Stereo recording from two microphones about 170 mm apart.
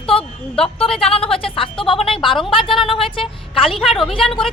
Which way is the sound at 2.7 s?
30° left (ahead or behind).